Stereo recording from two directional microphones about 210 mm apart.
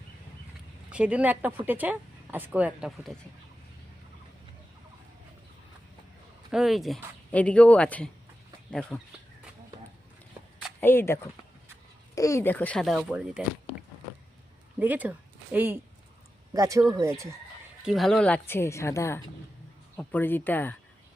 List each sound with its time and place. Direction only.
0.9 s speech: 5° right (ahead or behind)
6.5 s speech: centre (ahead or behind)
10.8 s a woman's voice: 10° left (ahead or behind)
14.8 s speech: 10° right (ahead or behind)
17.8 s a woman's voice: centre (ahead or behind)